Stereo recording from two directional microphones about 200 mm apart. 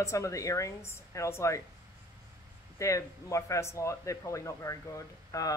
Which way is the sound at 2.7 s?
15° left (ahead or behind).